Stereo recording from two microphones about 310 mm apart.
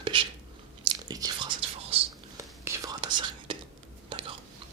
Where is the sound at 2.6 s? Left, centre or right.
Centre.